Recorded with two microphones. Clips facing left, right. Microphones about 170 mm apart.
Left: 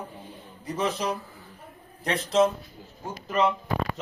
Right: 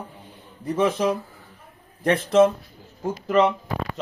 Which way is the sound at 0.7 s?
55° right (ahead or behind).